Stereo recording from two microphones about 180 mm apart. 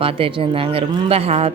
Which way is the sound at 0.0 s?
30° right (ahead or behind).